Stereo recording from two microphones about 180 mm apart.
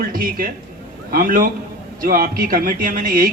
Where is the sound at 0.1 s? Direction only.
55° right (ahead or behind).